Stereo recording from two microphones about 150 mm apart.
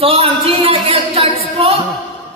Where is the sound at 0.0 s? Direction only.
40° right (ahead or behind).